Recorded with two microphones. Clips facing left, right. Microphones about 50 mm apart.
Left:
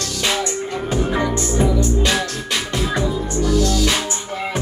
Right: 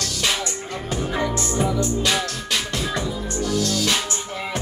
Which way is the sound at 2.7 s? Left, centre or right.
Centre.